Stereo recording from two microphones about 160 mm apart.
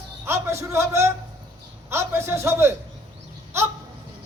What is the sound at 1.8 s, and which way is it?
Speech, 15° right (ahead or behind).